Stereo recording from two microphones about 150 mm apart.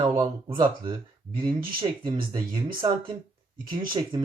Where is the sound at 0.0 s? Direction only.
35° right (ahead or behind).